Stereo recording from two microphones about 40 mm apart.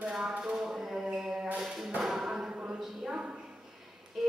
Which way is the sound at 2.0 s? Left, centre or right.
Centre.